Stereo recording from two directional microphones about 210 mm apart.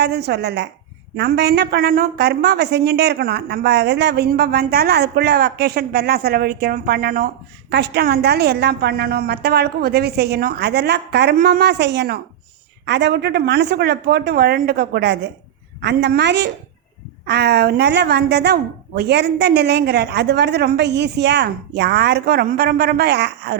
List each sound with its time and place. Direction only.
0.0 s a woman's voice: 50° right (ahead or behind)